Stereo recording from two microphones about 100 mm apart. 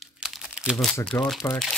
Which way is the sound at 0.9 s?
10° left (ahead or behind).